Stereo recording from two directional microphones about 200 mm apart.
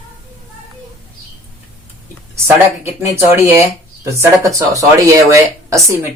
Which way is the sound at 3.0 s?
15° right (ahead or behind).